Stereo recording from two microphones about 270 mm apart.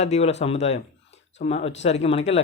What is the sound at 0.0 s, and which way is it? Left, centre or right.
Speech, left.